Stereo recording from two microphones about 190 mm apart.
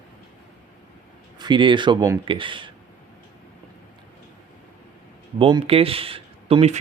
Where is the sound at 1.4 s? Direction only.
25° right (ahead or behind).